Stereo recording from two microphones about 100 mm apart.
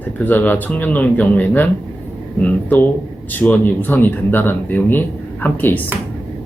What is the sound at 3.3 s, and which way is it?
Speech, 15° left (ahead or behind).